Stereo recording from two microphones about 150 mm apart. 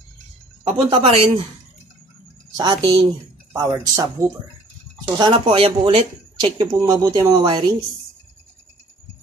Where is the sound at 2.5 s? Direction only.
35° right (ahead or behind).